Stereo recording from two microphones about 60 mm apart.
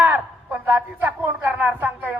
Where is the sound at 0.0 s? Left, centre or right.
Right.